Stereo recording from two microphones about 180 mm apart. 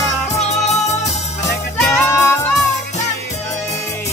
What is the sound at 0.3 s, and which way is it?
Music, 40° left (ahead or behind).